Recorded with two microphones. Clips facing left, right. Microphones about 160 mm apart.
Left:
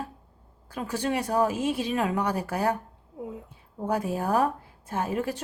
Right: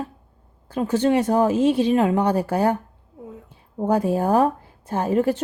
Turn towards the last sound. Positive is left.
turn(degrees=-30)  # may be behind; listen again after turning